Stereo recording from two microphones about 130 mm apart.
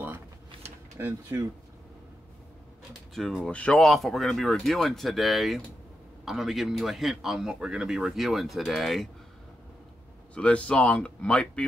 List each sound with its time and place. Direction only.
0.9 s speech: 20° right (ahead or behind)
2.9 s speech: centre (ahead or behind)
10.3 s speech: 10° left (ahead or behind)